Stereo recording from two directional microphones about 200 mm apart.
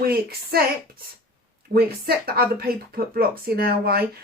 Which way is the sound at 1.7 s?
50° right (ahead or behind).